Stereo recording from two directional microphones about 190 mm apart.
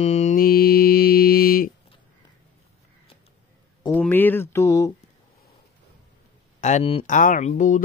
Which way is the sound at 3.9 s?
10° left (ahead or behind).